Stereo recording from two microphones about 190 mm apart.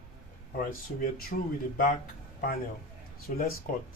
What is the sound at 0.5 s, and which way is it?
Speech, 45° left (ahead or behind).